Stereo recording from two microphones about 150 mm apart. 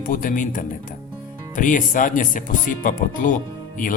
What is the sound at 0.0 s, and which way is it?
Speech, 65° left (ahead or behind).